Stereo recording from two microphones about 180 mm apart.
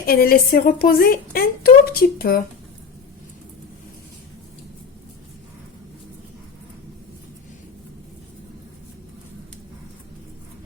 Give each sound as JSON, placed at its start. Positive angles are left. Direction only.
{"t": 0.0, "sound": "speech", "side_deg": 55}